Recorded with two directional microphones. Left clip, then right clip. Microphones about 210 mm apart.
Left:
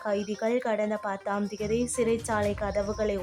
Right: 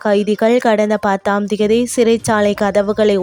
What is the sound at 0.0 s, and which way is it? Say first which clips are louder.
Speech: right 15 dB; 45° right (ahead or behind).